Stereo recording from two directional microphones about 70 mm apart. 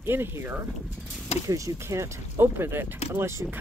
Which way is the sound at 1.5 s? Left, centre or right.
Right.